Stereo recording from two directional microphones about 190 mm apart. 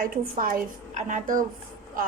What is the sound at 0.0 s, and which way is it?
A woman's voice, 45° right (ahead or behind).